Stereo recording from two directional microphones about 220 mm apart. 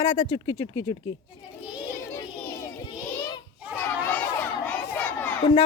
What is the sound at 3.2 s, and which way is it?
Children playing, 20° left (ahead or behind).